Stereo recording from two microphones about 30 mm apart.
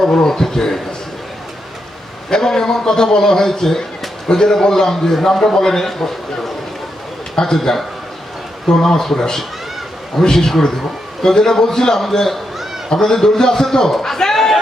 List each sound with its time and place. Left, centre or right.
0.1 s a man's voice: left
2.3 s a man's voice: centre
14.3 s chatter: centre